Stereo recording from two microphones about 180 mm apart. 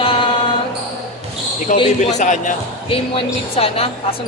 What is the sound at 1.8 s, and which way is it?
Speech, 40° left (ahead or behind).